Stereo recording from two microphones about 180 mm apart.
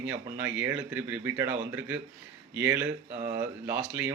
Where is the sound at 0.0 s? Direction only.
10° right (ahead or behind).